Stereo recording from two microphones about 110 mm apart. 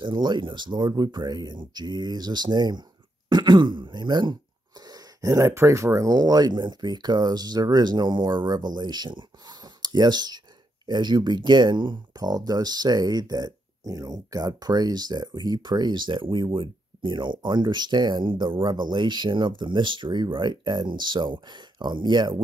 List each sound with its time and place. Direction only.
0.0 s speech: 45° right (ahead or behind)